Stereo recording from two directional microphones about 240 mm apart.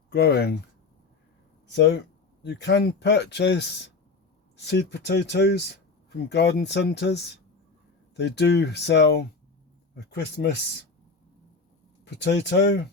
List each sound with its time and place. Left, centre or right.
0.1 s speech: left
1.7 s speech: left
12.2 s speech: left